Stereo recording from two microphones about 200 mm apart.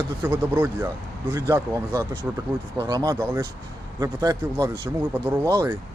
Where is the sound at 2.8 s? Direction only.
20° right (ahead or behind).